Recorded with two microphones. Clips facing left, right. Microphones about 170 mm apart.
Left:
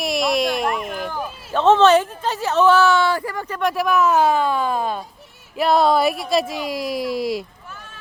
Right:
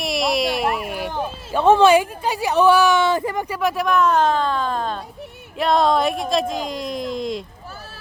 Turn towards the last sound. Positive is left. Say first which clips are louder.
# left 2 dB
turn(degrees=5)  # may be behind; listen again after turning